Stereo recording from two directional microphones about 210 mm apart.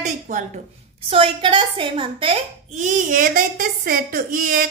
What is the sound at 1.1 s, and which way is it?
A child's voice, 25° right (ahead or behind).